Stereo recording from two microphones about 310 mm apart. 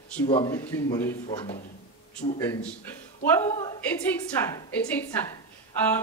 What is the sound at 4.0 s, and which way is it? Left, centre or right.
A woman's voice, centre.